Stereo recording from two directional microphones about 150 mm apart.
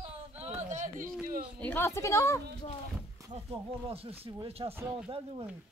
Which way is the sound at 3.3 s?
40° right (ahead or behind).